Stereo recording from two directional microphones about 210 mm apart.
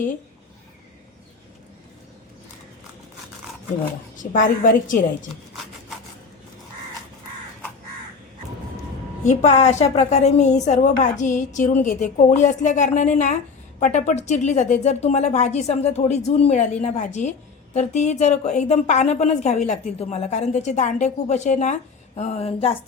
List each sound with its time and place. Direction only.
4.2 s a woman's voice: 40° left (ahead or behind)
9.2 s a woman's voice: 35° left (ahead or behind)